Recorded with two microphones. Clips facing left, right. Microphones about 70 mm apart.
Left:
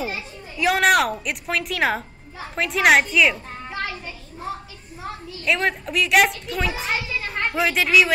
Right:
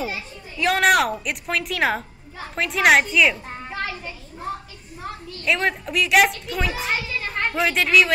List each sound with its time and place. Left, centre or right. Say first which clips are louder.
0.6 s a woman's voice: even; centre
3.7 s children playing: even; centre
5.0 s a child's voice: even; centre